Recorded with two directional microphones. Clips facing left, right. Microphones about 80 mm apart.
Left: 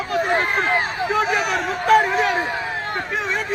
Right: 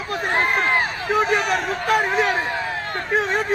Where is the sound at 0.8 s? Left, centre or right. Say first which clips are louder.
Left 4 dB; centre.